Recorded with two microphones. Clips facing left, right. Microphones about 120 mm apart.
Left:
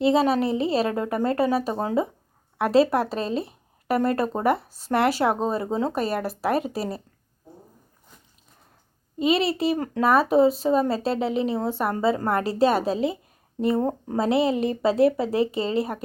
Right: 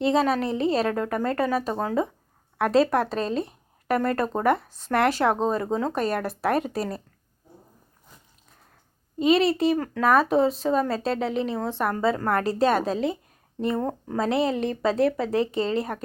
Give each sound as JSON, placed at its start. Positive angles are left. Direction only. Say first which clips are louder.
{"t": 0.0, "sound": "a woman's voice", "louder": "left 2 dB", "side_deg": 5}
{"t": 9.2, "sound": "speech", "louder": "right 2 dB", "side_deg": 5}
{"t": 9.7, "sound": "speech", "louder": "even", "side_deg": 20}
{"t": 10.0, "sound": "a woman's voice", "louder": "left 2 dB", "side_deg": 5}